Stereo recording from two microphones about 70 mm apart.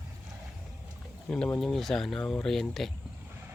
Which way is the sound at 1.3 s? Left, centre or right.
Centre.